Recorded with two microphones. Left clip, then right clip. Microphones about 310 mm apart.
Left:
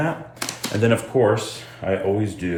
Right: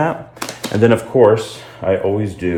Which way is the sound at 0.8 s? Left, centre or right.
Right.